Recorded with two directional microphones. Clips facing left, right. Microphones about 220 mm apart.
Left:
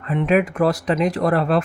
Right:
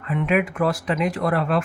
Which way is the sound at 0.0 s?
35° left (ahead or behind).